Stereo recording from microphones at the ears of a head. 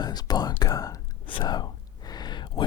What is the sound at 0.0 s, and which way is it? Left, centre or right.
Whispering, left.